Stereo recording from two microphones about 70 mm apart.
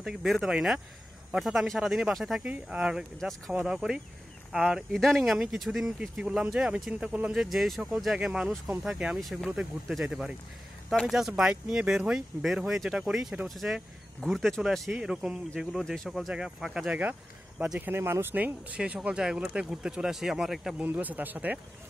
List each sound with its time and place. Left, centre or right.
0.0 s speech: centre
2.4 s speech: centre
3.2 s speech: centre
3.6 s speech: centre
7.3 s speech: centre
9.2 s speech: centre
9.6 s speech: centre
15.0 s speech: centre
15.8 s speech: centre
16.1 s speech: centre
17.7 s speech: right
18.3 s speech: right
18.8 s speech: centre
20.8 s speech: right